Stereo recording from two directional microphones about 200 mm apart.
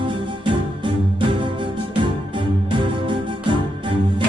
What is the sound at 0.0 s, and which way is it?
Music, 25° right (ahead or behind).